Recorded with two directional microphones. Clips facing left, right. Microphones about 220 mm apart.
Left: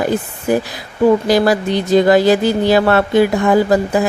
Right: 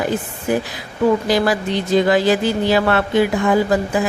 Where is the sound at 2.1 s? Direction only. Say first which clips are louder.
Left 4 dB; 40° left (ahead or behind).